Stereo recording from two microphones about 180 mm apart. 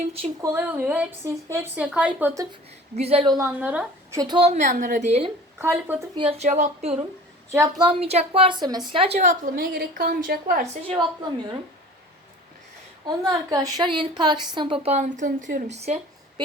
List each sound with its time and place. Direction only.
0.4 s a woman's voice: 10° right (ahead or behind)
2.9 s a woman's voice: 35° right (ahead or behind)
3.3 s a woman's voice: 10° right (ahead or behind)
4.2 s a woman's voice: 25° right (ahead or behind)
5.5 s a woman's voice: 10° right (ahead or behind)
6.1 s a woman's voice: 30° right (ahead or behind)
7.5 s a woman's voice: 15° right (ahead or behind)
7.9 s a woman's voice: 35° right (ahead or behind); by 10.6 s 50° right (ahead or behind)
10.8 s a woman's voice: 25° right (ahead or behind)
13.1 s a woman's voice: 20° right (ahead or behind); by 16.0 s 40° right (ahead or behind)